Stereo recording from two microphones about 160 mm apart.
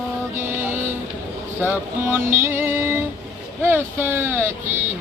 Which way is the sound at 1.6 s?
15° right (ahead or behind).